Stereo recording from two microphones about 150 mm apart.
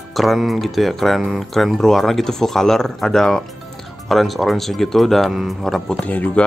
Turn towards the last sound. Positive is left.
turn(degrees=10)  # may be behind; listen again after turning